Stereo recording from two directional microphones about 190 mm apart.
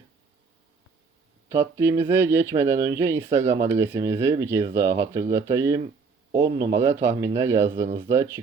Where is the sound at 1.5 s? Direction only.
15° right (ahead or behind).